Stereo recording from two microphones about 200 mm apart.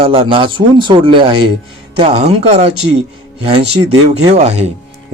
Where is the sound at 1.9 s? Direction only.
30° right (ahead or behind).